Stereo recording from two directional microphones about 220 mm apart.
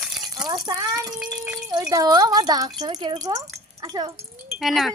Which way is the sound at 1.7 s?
15° right (ahead or behind).